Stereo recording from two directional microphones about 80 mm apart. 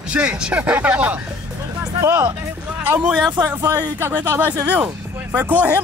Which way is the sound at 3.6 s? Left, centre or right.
Right.